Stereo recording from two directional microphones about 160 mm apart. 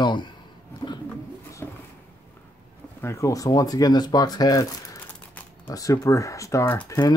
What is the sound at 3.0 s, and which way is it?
Speech, 20° left (ahead or behind).